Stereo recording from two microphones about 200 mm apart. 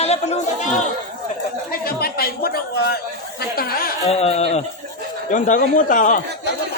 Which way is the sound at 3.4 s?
50° left (ahead or behind).